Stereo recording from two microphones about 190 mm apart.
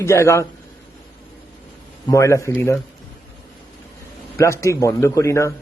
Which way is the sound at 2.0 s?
15° left (ahead or behind).